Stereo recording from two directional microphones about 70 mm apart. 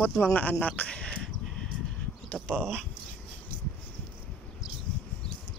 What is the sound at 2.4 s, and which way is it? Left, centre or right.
Speech, centre.